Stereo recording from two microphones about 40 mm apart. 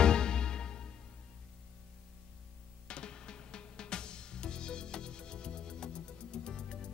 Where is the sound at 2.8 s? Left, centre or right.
Left.